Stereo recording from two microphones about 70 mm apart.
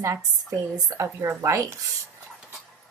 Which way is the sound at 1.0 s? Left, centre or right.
Right.